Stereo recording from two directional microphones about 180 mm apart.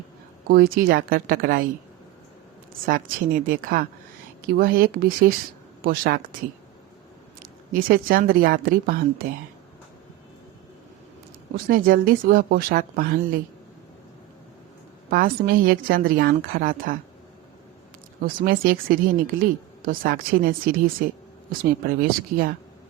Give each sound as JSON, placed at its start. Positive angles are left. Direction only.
{"t": 0.4, "sound": "speech", "side_deg": -55}
{"t": 2.8, "sound": "speech", "side_deg": -50}
{"t": 7.7, "sound": "speech", "side_deg": -55}
{"t": 11.5, "sound": "speech", "side_deg": -50}
{"t": 15.1, "sound": "speech", "side_deg": -55}
{"t": 18.2, "sound": "speech", "side_deg": -55}